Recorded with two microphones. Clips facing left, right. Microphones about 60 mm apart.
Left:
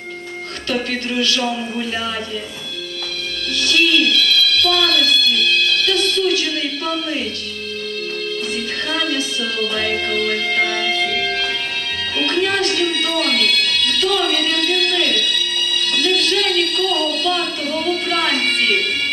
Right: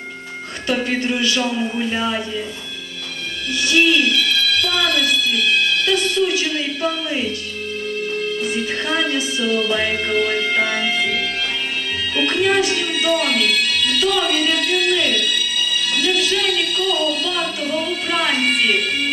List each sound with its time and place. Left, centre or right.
0.8 s speech: centre
3.5 s speech: centre
8.8 s speech: centre
12.2 s speech: centre